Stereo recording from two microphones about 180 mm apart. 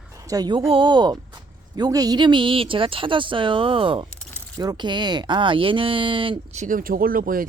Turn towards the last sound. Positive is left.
turn(degrees=-50)  # may be behind; listen again after turning